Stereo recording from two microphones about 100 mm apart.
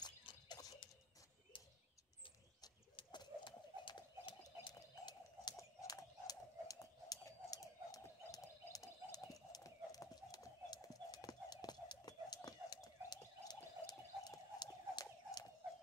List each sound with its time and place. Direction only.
0.0 s a sound: 50° left (ahead or behind)
1.5 s bird: 55° left (ahead or behind)
3.0 s bird: 50° left (ahead or behind)
4.4 s bird: 40° left (ahead or behind)